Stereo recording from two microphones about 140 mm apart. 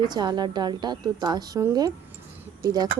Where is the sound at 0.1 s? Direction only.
30° right (ahead or behind).